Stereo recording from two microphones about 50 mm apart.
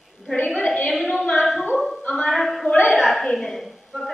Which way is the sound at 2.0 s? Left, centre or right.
Centre.